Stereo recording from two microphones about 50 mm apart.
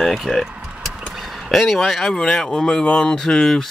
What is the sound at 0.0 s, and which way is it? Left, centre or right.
Vehicle, centre.